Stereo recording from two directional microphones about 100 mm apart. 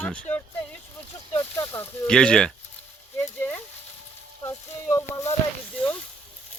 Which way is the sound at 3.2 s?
15° left (ahead or behind).